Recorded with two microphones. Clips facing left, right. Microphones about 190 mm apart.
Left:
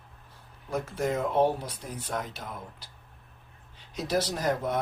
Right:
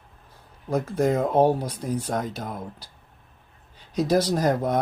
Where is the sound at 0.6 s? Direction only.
35° right (ahead or behind).